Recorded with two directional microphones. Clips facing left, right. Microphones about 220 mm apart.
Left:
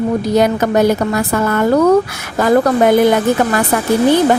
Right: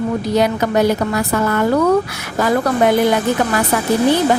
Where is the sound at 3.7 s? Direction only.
50° left (ahead or behind).